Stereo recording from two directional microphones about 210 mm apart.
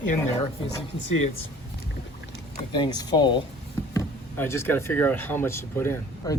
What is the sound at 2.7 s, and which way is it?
Speech, 20° left (ahead or behind).